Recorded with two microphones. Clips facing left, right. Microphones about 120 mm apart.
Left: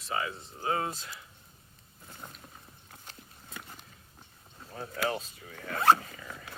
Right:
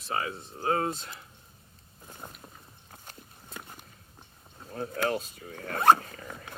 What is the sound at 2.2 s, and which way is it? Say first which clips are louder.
Boat: right 2 dB; 15° right (ahead or behind).